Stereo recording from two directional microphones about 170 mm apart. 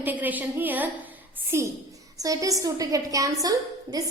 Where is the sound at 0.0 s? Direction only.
10° right (ahead or behind).